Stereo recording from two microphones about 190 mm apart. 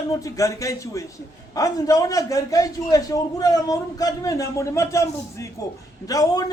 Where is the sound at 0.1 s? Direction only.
15° left (ahead or behind).